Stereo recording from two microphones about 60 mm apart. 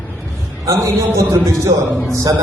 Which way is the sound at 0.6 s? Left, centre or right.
Right.